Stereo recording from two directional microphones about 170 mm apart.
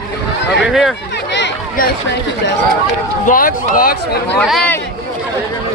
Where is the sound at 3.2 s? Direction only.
55° left (ahead or behind).